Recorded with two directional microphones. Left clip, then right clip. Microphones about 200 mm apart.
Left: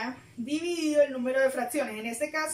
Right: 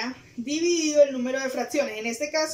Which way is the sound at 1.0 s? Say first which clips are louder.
Right 2 dB; 15° right (ahead or behind).